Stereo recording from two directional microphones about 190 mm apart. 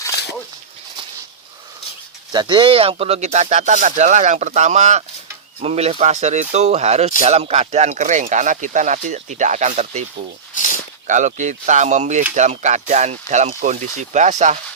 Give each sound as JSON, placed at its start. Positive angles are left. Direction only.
{"t": 2.3, "sound": "speech", "side_deg": -25}
{"t": 10.5, "sound": "a sound", "side_deg": 45}
{"t": 11.0, "sound": "speech", "side_deg": -40}